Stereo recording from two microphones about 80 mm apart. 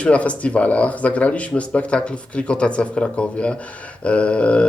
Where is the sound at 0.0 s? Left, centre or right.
Centre.